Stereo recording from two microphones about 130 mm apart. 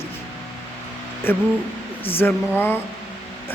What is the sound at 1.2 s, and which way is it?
Speech, 15° left (ahead or behind).